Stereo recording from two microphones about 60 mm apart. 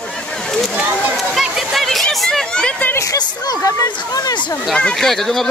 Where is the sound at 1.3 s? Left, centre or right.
Centre.